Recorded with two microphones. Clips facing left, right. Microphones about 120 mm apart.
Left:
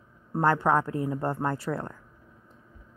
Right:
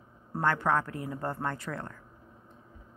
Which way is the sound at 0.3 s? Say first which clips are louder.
Left 4 dB; 30° left (ahead or behind).